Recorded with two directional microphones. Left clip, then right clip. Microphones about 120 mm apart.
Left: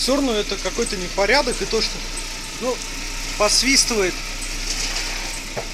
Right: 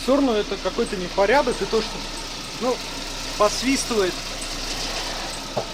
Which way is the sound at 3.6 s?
35° left (ahead or behind).